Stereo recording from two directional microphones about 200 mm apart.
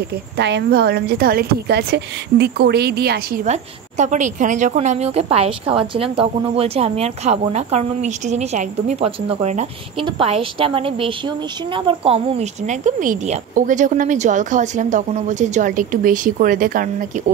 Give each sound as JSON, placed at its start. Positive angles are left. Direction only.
{"t": 0.4, "sound": "a woman's voice", "side_deg": -60}
{"t": 3.4, "sound": "a woman's voice", "side_deg": -35}